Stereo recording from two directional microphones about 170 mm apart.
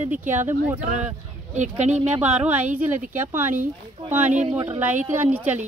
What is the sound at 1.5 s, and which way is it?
Speech, 45° right (ahead or behind).